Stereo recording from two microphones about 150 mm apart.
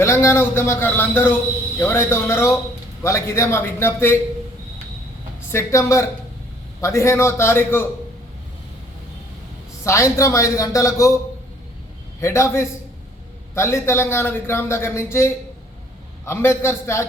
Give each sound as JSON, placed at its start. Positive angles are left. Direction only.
{"t": 0.0, "sound": "a man's voice", "side_deg": 15}
{"t": 5.5, "sound": "a man's voice", "side_deg": 20}
{"t": 9.8, "sound": "speech", "side_deg": 20}
{"t": 12.2, "sound": "a man's voice", "side_deg": 20}